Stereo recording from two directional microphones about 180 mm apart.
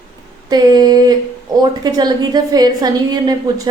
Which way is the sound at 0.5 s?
20° right (ahead or behind).